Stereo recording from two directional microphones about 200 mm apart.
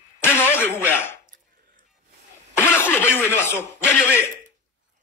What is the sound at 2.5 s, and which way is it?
Speech, 10° left (ahead or behind).